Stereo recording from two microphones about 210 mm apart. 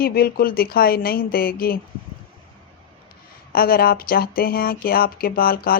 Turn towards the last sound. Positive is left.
turn(degrees=45)  # may be behind; listen again after turning